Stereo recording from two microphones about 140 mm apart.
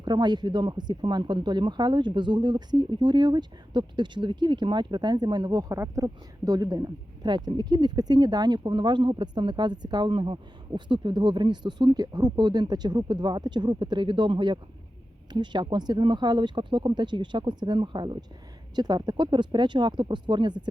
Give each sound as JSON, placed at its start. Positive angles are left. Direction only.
{"t": 0.0, "sound": "speech", "side_deg": -30}